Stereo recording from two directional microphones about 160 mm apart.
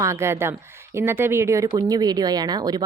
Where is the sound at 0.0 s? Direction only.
15° right (ahead or behind).